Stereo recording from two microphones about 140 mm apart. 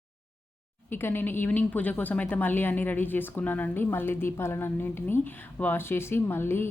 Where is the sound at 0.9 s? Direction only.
15° left (ahead or behind).